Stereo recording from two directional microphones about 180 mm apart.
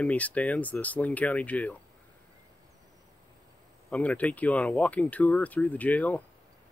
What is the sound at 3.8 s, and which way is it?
Speech, 10° left (ahead or behind).